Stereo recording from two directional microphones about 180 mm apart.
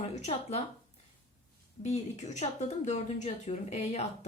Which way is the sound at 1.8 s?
40° left (ahead or behind).